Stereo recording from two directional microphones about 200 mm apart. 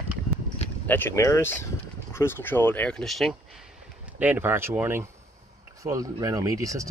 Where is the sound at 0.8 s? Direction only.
10° left (ahead or behind).